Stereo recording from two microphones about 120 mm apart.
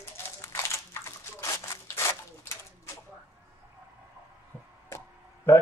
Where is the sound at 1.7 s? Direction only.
20° left (ahead or behind).